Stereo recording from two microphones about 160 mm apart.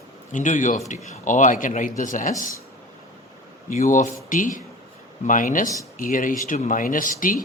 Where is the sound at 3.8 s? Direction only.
50° left (ahead or behind).